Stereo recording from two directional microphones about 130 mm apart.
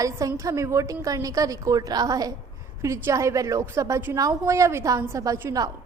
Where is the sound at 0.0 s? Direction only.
25° right (ahead or behind).